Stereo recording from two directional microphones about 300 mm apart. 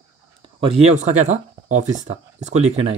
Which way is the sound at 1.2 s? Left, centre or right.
Right.